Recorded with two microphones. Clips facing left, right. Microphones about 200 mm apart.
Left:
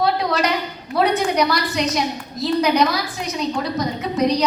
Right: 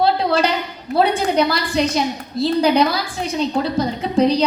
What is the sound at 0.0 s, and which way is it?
A woman's voice, 30° right (ahead or behind).